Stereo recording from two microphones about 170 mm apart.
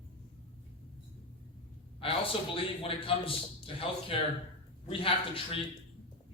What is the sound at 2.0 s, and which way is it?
A man's voice, 35° left (ahead or behind).